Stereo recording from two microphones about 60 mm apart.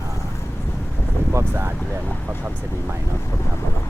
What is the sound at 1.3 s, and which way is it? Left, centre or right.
Speech, right.